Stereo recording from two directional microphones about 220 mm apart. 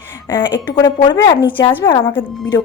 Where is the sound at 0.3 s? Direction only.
20° left (ahead or behind).